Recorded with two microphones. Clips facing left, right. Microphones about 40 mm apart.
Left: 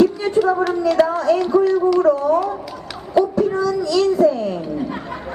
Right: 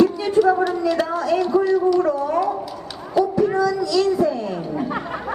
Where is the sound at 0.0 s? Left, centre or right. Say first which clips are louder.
Even; left.